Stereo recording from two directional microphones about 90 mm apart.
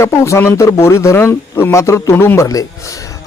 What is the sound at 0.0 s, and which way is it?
Speech, 30° left (ahead or behind).